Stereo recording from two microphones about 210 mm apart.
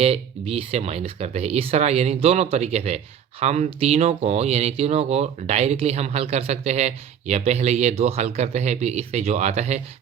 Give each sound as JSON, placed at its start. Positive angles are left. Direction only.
{"t": 0.0, "sound": "speech", "side_deg": -30}